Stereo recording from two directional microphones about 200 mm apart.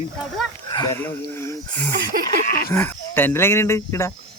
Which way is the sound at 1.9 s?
45° right (ahead or behind).